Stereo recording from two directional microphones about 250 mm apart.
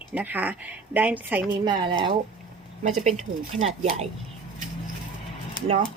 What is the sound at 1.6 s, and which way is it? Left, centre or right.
Speech, centre.